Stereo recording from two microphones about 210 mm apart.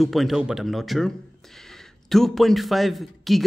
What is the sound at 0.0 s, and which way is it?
A man's voice, centre (ahead or behind).